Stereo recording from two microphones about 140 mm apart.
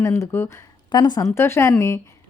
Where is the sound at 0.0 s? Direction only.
20° left (ahead or behind).